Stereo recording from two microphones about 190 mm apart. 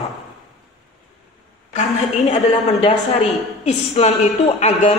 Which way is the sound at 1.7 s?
35° left (ahead or behind).